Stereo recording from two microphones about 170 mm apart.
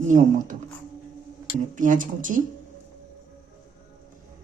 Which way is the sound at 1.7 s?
50° right (ahead or behind).